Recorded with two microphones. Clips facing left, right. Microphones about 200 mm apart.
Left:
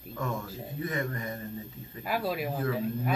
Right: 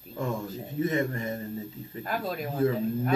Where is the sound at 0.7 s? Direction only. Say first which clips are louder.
Right 6 dB; 25° right (ahead or behind).